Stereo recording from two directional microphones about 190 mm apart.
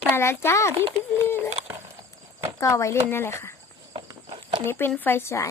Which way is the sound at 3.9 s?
25° right (ahead or behind).